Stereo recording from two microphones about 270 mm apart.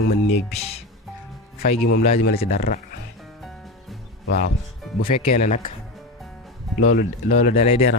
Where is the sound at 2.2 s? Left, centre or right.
Left.